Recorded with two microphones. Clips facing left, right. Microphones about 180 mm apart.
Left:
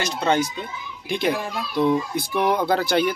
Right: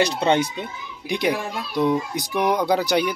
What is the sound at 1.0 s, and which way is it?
A child's voice, 15° right (ahead or behind).